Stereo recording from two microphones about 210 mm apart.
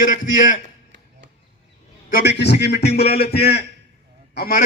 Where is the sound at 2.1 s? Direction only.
50° left (ahead or behind).